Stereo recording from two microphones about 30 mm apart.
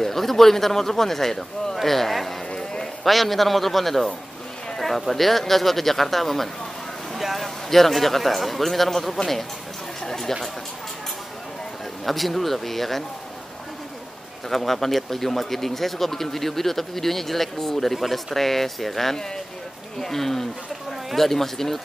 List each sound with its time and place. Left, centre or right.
0.0 s a man's voice: centre
2.5 s a sound: left
3.0 s a man's voice: centre
7.2 s a sound: centre
7.4 s a man's voice: centre
12.1 s a man's voice: centre
14.5 s a man's voice: centre
18.3 s speech: centre